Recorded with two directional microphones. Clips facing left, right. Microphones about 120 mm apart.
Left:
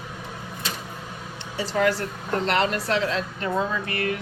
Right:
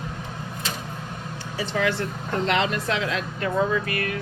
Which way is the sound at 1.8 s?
40° left (ahead or behind).